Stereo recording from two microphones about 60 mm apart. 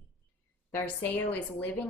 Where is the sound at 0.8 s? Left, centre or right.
Left.